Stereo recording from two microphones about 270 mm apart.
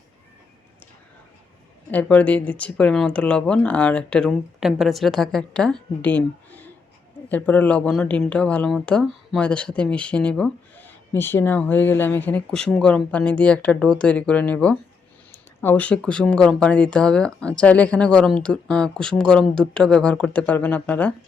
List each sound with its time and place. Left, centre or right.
1.9 s speech: centre